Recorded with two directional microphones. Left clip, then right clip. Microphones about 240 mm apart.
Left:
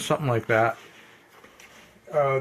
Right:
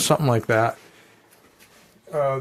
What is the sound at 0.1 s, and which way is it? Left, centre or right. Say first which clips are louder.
Speech: right 2 dB; right.